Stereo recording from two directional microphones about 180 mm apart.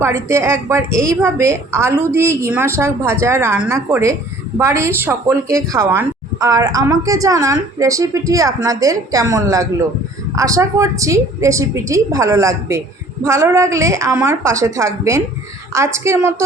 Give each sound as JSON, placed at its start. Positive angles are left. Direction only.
{"t": 0.0, "sound": "a woman's voice", "side_deg": -15}